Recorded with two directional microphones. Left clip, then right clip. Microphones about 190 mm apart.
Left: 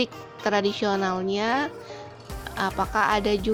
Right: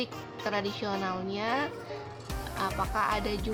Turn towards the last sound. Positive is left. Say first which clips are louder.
# left 8 dB
turn(degrees=40)  # may be behind; listen again after turning